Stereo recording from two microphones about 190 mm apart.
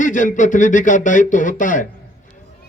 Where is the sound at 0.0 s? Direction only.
45° left (ahead or behind).